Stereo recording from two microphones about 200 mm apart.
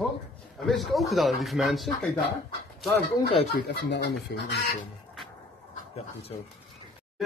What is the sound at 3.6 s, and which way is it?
Speech, 55° left (ahead or behind).